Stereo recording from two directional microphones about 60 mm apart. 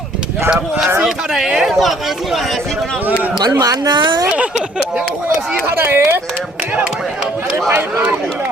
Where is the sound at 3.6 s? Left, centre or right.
Right.